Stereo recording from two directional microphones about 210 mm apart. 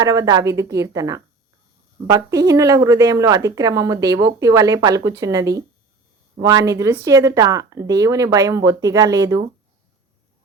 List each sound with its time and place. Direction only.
0.0 s speech: 15° right (ahead or behind)